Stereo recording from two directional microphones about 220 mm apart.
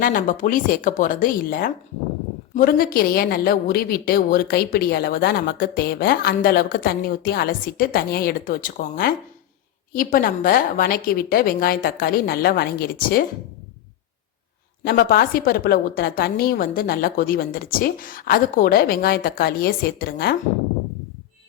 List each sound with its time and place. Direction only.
0.0 s a woman's voice: 40° left (ahead or behind)
14.8 s a woman's voice: 40° left (ahead or behind)